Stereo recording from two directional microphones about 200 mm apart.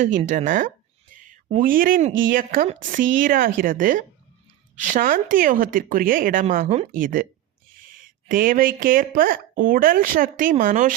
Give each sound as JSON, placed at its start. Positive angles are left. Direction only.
{"t": 0.0, "sound": "speech", "side_deg": -40}
{"t": 1.1, "sound": "a sound", "side_deg": -40}
{"t": 1.5, "sound": "speech", "side_deg": -45}